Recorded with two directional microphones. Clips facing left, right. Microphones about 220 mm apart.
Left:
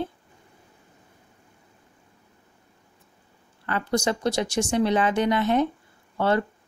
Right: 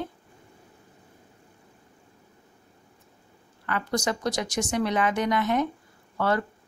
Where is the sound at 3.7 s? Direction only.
30° left (ahead or behind).